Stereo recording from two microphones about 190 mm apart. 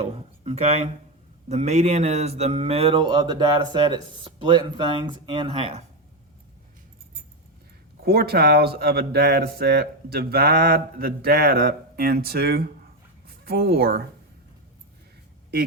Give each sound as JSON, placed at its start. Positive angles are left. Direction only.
{"t": 0.0, "sound": "speech", "side_deg": -35}
{"t": 8.0, "sound": "speech", "side_deg": -55}